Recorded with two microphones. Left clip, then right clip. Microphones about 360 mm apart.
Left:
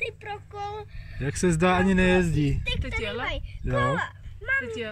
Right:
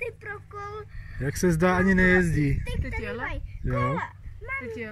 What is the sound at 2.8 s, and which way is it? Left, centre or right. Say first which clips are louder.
Speech: right 1 dB; left.